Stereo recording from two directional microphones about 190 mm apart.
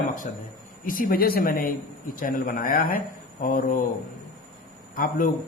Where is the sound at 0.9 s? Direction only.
50° left (ahead or behind).